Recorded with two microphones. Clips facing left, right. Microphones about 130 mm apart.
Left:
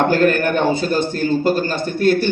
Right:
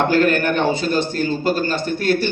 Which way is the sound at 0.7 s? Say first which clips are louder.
Left 1 dB; 55° left (ahead or behind).